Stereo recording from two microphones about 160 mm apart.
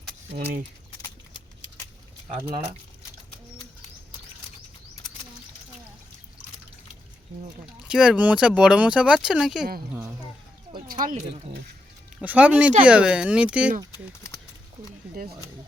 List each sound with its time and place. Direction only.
7.8 s speech: 5° right (ahead or behind)
10.8 s speech: 60° right (ahead or behind)
12.2 s speech: 10° right (ahead or behind)